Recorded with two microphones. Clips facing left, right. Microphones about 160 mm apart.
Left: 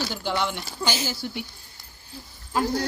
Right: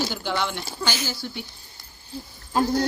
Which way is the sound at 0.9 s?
20° left (ahead or behind).